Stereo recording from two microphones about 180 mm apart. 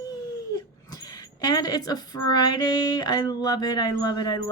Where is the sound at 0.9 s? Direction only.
20° left (ahead or behind).